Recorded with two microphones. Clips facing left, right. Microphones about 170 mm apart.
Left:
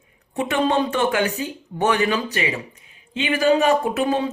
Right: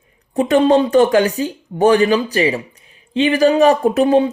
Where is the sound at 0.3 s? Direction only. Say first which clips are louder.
Right 8 dB; 35° right (ahead or behind).